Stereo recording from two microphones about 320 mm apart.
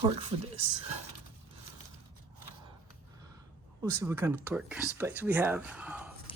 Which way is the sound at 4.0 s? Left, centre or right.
Centre.